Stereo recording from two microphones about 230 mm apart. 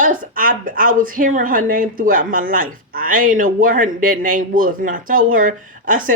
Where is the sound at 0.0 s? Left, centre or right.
Right.